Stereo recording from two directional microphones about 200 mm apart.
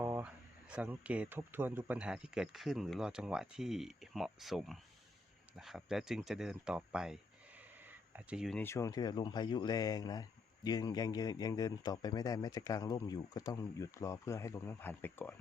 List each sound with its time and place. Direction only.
0.0 s speech: 10° right (ahead or behind)
8.6 s speech: 15° left (ahead or behind)